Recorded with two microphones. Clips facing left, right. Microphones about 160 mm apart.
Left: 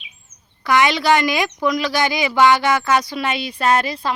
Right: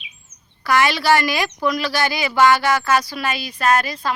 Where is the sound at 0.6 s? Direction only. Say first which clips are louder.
Left 1 dB; 20° left (ahead or behind).